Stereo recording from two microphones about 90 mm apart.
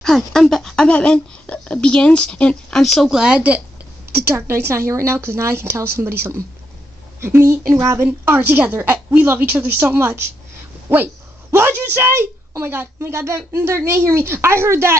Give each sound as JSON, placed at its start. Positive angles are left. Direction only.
{"t": 0.0, "sound": "speech", "side_deg": 5}
{"t": 3.2, "sound": "a woman's voice", "side_deg": -15}
{"t": 4.0, "sound": "a woman's voice", "side_deg": -25}
{"t": 12.2, "sound": "a woman's voice", "side_deg": -25}